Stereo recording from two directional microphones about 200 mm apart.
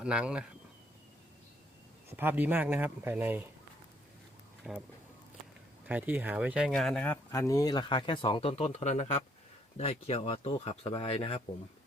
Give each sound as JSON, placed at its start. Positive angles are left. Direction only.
{"t": 0.0, "sound": "speech", "side_deg": -5}
{"t": 2.1, "sound": "speech", "side_deg": -10}
{"t": 4.7, "sound": "speech", "side_deg": 0}
{"t": 5.9, "sound": "speech", "side_deg": -10}